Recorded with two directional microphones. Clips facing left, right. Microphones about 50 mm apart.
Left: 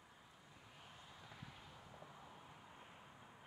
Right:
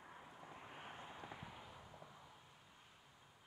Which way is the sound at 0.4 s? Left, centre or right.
Right.